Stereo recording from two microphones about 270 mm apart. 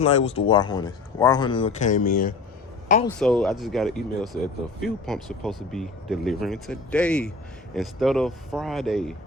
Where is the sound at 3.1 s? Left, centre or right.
Centre.